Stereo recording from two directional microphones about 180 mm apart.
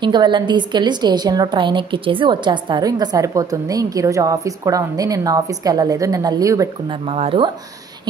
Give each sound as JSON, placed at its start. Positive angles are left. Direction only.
{"t": 0.0, "sound": "a woman's voice", "side_deg": -25}
{"t": 7.1, "sound": "speech", "side_deg": -30}